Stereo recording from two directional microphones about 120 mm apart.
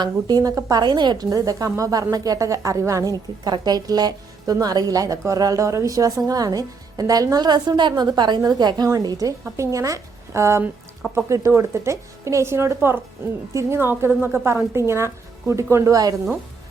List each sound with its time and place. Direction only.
0.0 s a woman's voice: 35° right (ahead or behind)